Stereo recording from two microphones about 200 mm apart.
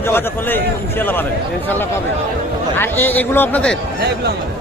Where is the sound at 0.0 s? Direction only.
10° left (ahead or behind).